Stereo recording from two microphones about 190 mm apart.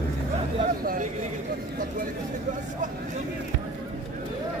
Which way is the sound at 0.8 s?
50° right (ahead or behind).